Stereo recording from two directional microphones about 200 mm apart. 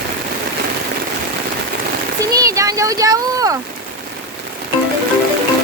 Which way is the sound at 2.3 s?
15° right (ahead or behind).